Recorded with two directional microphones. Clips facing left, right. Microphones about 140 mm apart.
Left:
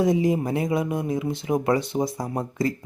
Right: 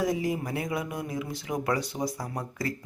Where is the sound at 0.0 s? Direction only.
20° left (ahead or behind).